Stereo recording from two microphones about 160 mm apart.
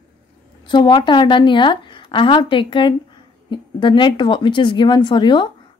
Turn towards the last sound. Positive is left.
turn(degrees=30)  # may be behind; listen again after turning